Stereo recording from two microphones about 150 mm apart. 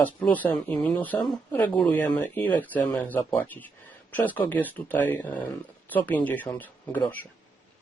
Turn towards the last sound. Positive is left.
turn(degrees=10)  # may be behind; listen again after turning